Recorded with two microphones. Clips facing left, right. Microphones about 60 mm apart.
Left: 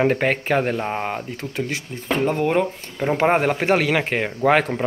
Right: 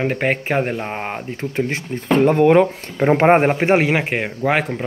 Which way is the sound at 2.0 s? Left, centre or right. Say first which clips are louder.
Right 7 dB; right.